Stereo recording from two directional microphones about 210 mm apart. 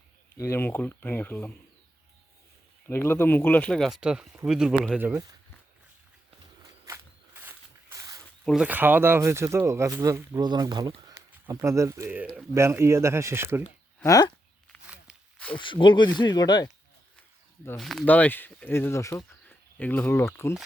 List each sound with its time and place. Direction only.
0.3 s speech: 10° left (ahead or behind)
2.8 s speech: 10° left (ahead or behind); by 5.2 s 10° right (ahead or behind)
6.8 s walk: 10° right (ahead or behind)
8.4 s speech: 5° right (ahead or behind)
14.0 s speech: 15° left (ahead or behind)
15.5 s speech: 25° left (ahead or behind)
17.7 s speech: centre (ahead or behind)